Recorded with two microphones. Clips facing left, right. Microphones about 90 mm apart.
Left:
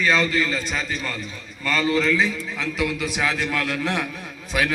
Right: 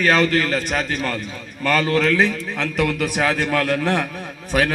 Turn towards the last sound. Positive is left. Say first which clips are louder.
# right 4 dB
turn(degrees=-45)  # may be behind; listen again after turning